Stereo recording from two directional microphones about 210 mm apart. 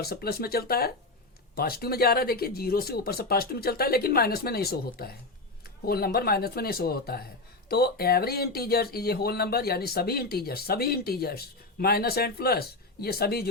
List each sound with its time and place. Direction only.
0.0 s speech: 45° left (ahead or behind)